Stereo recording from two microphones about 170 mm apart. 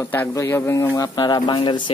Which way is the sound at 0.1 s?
15° left (ahead or behind).